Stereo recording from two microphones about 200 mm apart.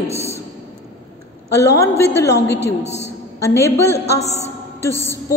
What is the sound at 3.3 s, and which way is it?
Speech, 15° left (ahead or behind).